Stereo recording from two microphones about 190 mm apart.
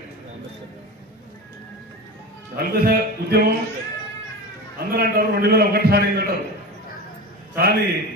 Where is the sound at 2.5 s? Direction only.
50° right (ahead or behind).